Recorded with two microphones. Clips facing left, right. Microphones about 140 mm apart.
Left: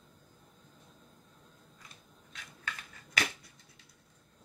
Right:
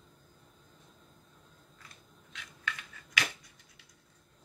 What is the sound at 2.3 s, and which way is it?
Finger snapping, 35° left (ahead or behind).